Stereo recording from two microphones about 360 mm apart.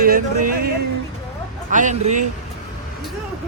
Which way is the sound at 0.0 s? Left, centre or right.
Right.